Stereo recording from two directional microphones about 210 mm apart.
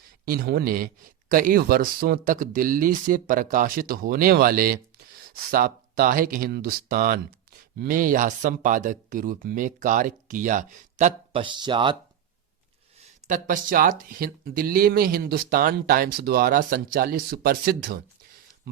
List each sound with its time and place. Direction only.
0.3 s speech: 45° right (ahead or behind); by 11.9 s 20° right (ahead or behind)
13.0 s speech: 35° right (ahead or behind)